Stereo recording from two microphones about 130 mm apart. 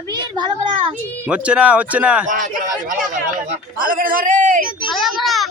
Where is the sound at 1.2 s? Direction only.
10° right (ahead or behind).